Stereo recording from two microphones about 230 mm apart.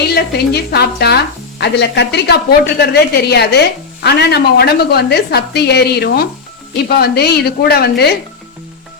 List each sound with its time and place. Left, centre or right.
0.1 s speech: left